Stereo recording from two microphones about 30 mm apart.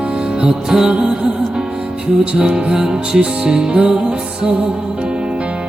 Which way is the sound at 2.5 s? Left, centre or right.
Right.